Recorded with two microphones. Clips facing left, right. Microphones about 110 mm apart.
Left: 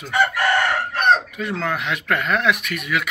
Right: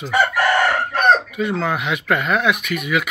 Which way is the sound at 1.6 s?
10° right (ahead or behind).